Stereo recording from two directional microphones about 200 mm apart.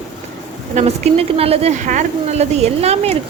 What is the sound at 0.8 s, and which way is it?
Speech, 35° right (ahead or behind).